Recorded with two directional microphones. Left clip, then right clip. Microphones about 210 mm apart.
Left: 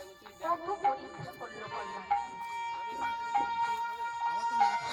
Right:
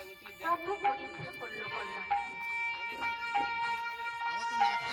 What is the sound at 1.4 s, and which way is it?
Music, 30° left (ahead or behind).